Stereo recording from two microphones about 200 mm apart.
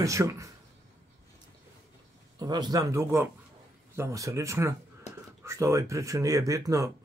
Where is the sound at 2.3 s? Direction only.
20° right (ahead or behind).